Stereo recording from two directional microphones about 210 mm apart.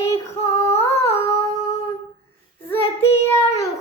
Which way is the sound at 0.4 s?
30° left (ahead or behind).